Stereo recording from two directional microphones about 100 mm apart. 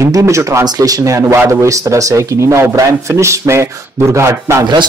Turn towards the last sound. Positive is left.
turn(degrees=-30)  # may be behind; listen again after turning